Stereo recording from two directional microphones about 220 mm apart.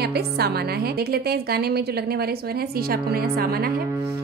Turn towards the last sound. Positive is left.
turn(degrees=-45)  # may be behind; listen again after turning